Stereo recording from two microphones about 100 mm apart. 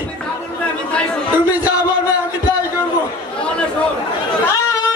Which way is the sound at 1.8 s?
40° left (ahead or behind).